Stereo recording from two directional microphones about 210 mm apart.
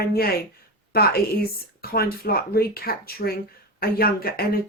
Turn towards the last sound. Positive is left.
turn(degrees=45)  # may be behind; listen again after turning